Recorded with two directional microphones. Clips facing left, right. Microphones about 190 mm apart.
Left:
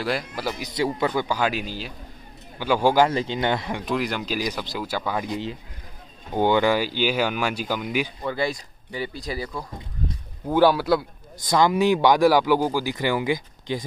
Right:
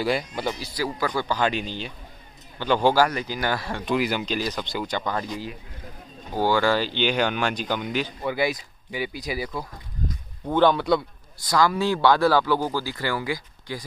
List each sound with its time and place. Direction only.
0.0 s a man's voice: centre (ahead or behind)
0.6 s speech: 25° left (ahead or behind)
1.2 s speech: 10° left (ahead or behind)
3.0 s speech: 25° left (ahead or behind)
3.8 s a man's voice: centre (ahead or behind)
5.3 s speech: 25° left (ahead or behind); by 8.1 s 10° left (ahead or behind)
8.2 s speech: 10° right (ahead or behind)
10.5 s a man's voice: 5° left (ahead or behind)
11.3 s speech: 20° left (ahead or behind)